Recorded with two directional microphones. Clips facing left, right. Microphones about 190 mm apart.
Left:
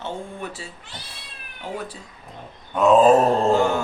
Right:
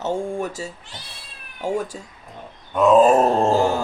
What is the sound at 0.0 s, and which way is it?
Speech, 45° right (ahead or behind).